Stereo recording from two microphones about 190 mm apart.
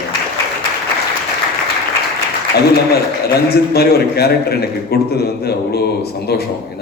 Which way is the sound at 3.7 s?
55° left (ahead or behind).